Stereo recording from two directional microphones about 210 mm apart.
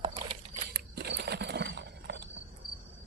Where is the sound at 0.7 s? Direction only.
50° right (ahead or behind).